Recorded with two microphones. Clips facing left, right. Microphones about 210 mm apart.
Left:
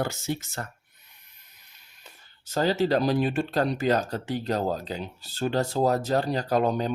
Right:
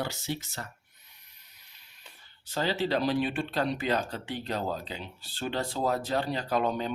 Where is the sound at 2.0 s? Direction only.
45° left (ahead or behind).